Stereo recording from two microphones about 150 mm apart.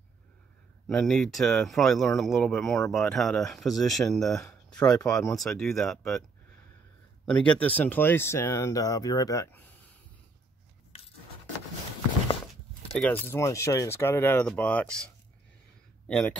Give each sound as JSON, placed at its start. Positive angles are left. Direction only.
{"t": 0.8, "sound": "speech", "side_deg": 5}
{"t": 7.2, "sound": "speech", "side_deg": 5}
{"t": 12.9, "sound": "speech", "side_deg": 10}
{"t": 16.1, "sound": "speech", "side_deg": 5}